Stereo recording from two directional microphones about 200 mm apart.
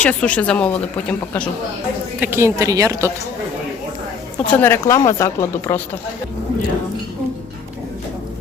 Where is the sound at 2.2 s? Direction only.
10° right (ahead or behind).